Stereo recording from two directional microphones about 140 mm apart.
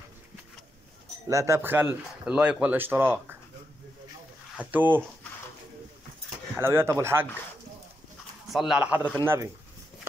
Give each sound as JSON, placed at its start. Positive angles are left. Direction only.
{"t": 1.3, "sound": "speech", "side_deg": -20}
{"t": 4.6, "sound": "speech", "side_deg": -10}
{"t": 6.5, "sound": "speech", "side_deg": -15}
{"t": 8.5, "sound": "speech", "side_deg": -5}